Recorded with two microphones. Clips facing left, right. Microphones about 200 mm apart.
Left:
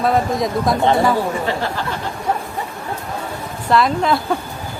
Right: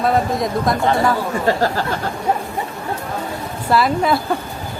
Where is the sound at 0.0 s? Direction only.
Centre (ahead or behind).